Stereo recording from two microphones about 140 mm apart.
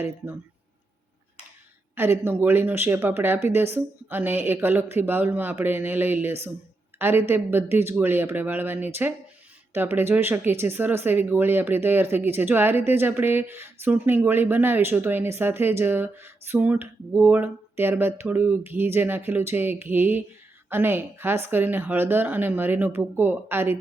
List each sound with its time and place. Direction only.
2.0 s speech: 15° right (ahead or behind)